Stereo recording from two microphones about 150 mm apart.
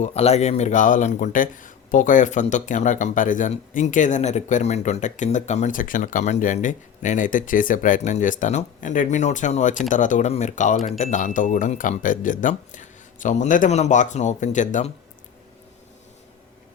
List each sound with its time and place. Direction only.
0.0 s speech: 45° left (ahead or behind)